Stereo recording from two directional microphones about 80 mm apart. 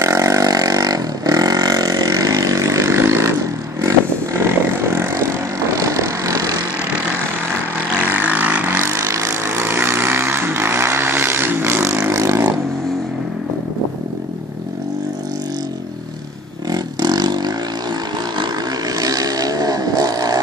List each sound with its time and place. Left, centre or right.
0.0 s vehicle: right
4.5 s vehicle: right
8.2 s vehicle: centre
8.6 s vehicle: right
16.7 s vehicle: right
18.9 s vehicle: right